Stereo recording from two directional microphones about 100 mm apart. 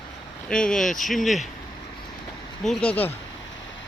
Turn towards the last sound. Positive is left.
turn(degrees=15)  # may be behind; listen again after turning